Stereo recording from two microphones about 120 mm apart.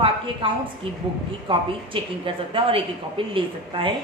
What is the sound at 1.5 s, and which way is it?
A woman's voice, 45° right (ahead or behind).